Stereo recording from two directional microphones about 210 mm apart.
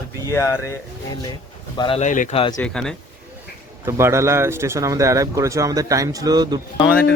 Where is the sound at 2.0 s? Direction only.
35° left (ahead or behind).